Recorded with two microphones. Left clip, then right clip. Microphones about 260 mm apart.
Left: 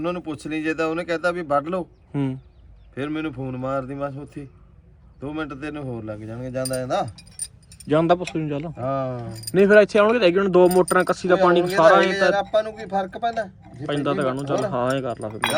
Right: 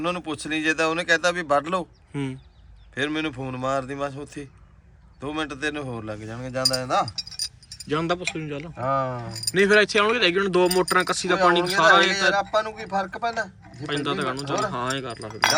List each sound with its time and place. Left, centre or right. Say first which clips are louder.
0.0 s speech: even; centre
2.1 s speech: left 4 dB; centre
2.9 s speech: right 2 dB; centre
7.9 s speech: left 6 dB; centre
8.7 s speech: right 4 dB; centre
9.6 s speech: left 4 dB; centre